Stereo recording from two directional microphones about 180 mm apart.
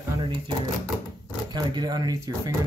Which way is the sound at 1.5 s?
25° right (ahead or behind).